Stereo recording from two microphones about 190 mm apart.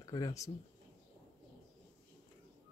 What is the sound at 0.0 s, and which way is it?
Speech, 20° left (ahead or behind).